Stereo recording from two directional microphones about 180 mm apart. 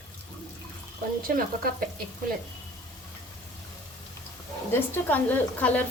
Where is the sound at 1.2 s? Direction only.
55° right (ahead or behind).